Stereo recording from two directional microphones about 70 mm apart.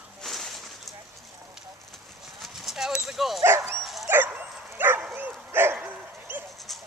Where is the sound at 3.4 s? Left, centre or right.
Right.